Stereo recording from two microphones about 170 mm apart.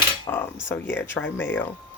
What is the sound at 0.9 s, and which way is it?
Speech, 90° left.